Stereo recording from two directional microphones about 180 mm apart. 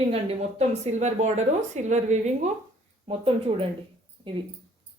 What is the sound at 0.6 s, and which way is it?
A woman's voice, 40° right (ahead or behind).